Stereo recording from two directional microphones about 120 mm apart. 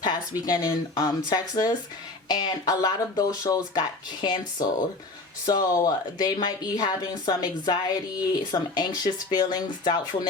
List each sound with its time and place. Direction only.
0.0 s speech: 35° left (ahead or behind)
5.5 s speech: 30° left (ahead or behind)